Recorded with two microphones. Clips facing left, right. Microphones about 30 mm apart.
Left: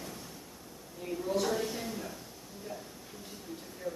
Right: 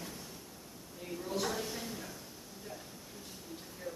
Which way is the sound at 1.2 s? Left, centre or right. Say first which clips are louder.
Left 5 dB; centre.